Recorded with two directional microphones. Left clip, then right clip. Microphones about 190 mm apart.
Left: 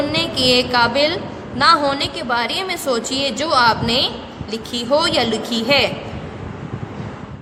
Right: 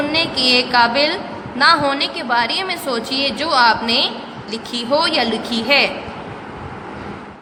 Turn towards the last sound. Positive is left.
turn(degrees=15)  # may be behind; listen again after turning